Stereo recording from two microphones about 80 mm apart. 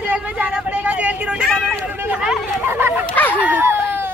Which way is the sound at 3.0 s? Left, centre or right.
Left.